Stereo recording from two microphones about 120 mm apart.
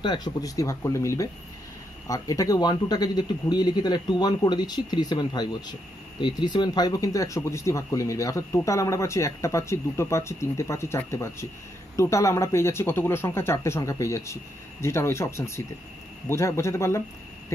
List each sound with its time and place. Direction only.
0.0 s speech: 35° left (ahead or behind)